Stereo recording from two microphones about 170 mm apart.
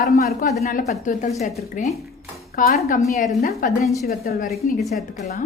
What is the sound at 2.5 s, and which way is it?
A woman's voice, 55° left (ahead or behind).